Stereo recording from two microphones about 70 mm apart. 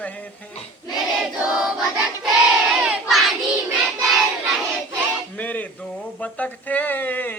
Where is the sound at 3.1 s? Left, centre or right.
Centre.